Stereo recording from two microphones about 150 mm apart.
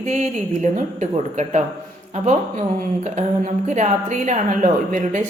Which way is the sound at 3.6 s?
50° right (ahead or behind).